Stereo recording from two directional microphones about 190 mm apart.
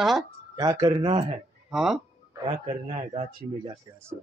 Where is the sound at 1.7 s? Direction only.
Centre (ahead or behind).